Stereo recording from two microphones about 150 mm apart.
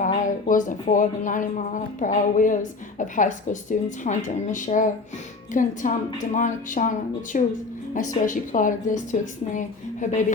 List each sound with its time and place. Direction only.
0.0 s speech: 60° left (ahead or behind)